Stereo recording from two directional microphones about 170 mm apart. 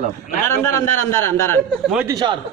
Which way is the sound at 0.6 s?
15° left (ahead or behind).